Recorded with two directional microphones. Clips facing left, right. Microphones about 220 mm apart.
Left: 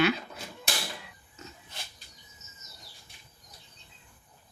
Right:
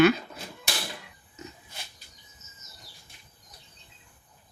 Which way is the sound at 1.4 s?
20° right (ahead or behind).